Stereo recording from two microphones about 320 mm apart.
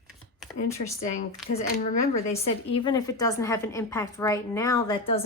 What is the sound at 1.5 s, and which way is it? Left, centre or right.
A woman's voice, left.